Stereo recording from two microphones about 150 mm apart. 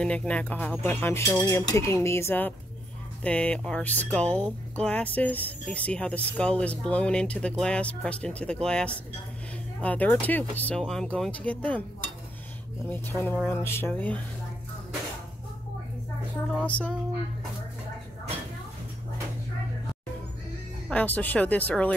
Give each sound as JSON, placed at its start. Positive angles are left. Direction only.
{"t": 0.0, "sound": "speech", "side_deg": 5}
{"t": 12.9, "sound": "speech", "side_deg": 15}
{"t": 16.5, "sound": "music", "side_deg": 10}
{"t": 20.9, "sound": "speech", "side_deg": 10}